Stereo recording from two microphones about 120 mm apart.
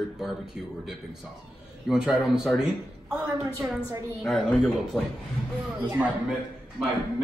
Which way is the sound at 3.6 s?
25° right (ahead or behind).